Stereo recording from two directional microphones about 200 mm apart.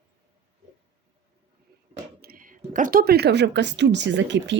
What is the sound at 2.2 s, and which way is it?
Speech, 45° right (ahead or behind).